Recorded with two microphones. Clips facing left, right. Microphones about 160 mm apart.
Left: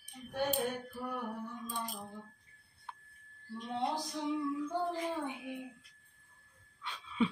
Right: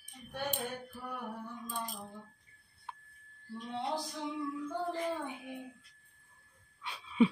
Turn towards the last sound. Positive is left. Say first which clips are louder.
# right 5 dB
turn(degrees=-15)  # may be behind; listen again after turning